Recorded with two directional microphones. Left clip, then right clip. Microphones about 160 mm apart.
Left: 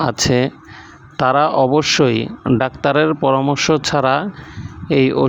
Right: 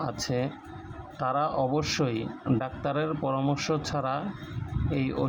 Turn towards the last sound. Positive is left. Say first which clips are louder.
# left 15 dB
turn(degrees=55)  # may be behind; listen again after turning